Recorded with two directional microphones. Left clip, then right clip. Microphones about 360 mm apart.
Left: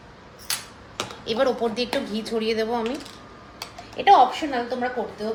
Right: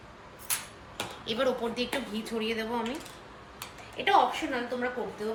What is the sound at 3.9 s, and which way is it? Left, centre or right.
Speech, left.